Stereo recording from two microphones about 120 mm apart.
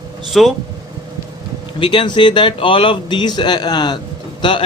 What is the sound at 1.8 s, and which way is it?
A man's voice, 40° left (ahead or behind).